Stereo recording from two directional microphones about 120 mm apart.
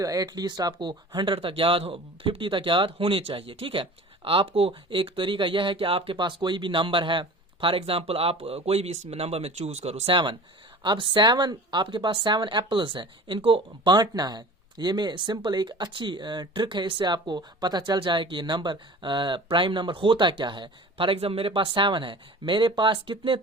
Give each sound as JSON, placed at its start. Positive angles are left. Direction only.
{"t": 0.0, "sound": "speech", "side_deg": -30}
{"t": 10.8, "sound": "speech", "side_deg": -40}